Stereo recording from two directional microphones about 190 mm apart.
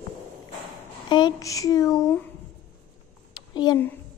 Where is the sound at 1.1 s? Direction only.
25° left (ahead or behind).